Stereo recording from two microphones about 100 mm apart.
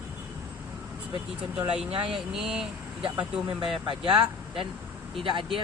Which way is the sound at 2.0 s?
5° right (ahead or behind).